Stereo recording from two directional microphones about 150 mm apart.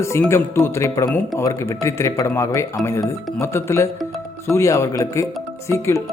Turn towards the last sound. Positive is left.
turn(degrees=20)  # may be behind; listen again after turning